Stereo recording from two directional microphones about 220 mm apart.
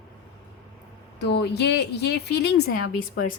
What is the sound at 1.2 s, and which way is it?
A woman's voice, 50° left (ahead or behind).